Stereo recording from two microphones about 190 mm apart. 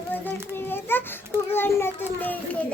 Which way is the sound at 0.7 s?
10° left (ahead or behind).